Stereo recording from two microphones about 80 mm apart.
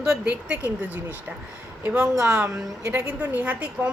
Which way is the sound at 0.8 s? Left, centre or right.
Right.